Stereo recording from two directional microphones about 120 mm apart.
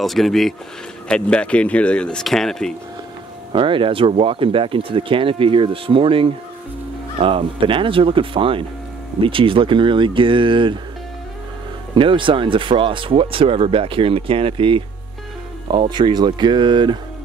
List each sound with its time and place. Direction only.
0.0 s speech: centre (ahead or behind)
3.5 s speech: 45° right (ahead or behind)
11.9 s speech: 45° right (ahead or behind)